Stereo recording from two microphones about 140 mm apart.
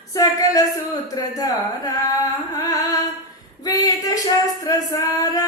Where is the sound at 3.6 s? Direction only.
25° left (ahead or behind).